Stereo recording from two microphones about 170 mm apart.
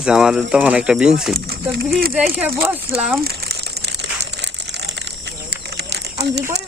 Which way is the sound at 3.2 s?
65° right (ahead or behind).